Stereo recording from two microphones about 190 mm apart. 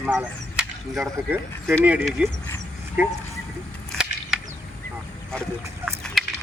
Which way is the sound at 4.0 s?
5° right (ahead or behind).